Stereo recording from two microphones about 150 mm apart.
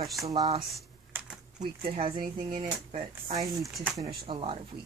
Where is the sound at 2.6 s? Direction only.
45° right (ahead or behind).